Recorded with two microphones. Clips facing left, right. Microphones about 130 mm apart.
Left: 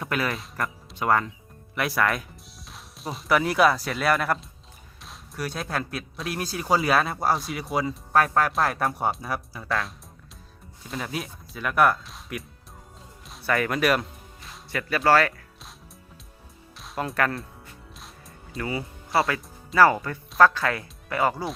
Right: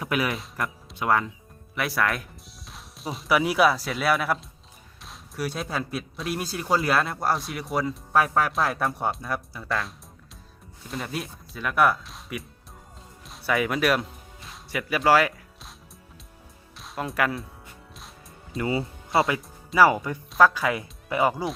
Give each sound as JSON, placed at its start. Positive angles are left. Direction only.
{"t": 0.0, "sound": "speech", "side_deg": -5}
{"t": 16.7, "sound": "speech", "side_deg": 0}
{"t": 18.6, "sound": "speech", "side_deg": -25}
{"t": 19.3, "sound": "speech", "side_deg": -10}